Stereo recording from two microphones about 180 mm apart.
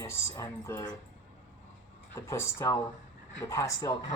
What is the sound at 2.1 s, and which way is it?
Speech, 15° left (ahead or behind).